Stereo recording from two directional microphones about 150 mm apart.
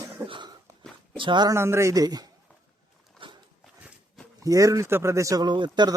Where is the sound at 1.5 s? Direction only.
15° right (ahead or behind).